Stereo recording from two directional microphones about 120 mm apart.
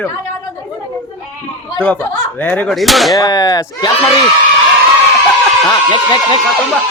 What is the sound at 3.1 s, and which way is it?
Speech, 30° left (ahead or behind).